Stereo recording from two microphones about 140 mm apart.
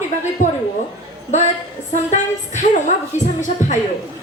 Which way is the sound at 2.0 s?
60° left (ahead or behind).